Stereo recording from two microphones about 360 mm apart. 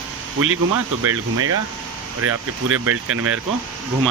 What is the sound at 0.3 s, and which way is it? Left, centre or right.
Speech, right.